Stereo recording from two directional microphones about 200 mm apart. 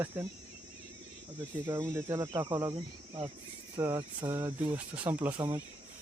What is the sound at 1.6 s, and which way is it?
Speech, 15° right (ahead or behind).